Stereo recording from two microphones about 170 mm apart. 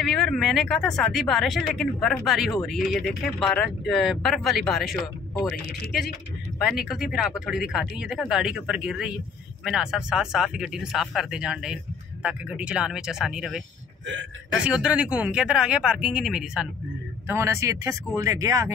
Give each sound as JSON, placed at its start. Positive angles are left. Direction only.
{"t": 0.0, "sound": "speech", "side_deg": 0}
{"t": 14.6, "sound": "speech", "side_deg": -5}
{"t": 17.3, "sound": "speech", "side_deg": -15}